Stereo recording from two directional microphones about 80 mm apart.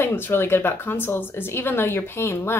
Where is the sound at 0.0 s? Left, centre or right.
Left.